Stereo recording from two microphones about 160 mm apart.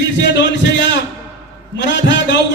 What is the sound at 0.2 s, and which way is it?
A man's voice, 90° left.